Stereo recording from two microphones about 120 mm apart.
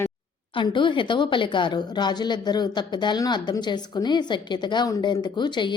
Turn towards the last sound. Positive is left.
turn(degrees=40)  # may be behind; listen again after turning